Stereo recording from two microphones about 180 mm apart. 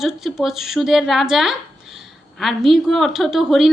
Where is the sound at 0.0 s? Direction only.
Centre (ahead or behind).